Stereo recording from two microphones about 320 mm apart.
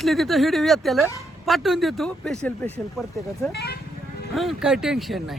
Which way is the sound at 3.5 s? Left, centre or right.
Left.